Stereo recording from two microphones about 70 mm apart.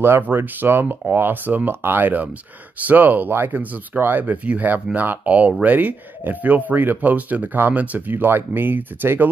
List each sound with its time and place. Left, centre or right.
0.0 s speech: right